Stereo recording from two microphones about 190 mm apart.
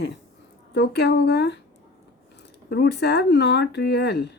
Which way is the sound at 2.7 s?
60° left (ahead or behind).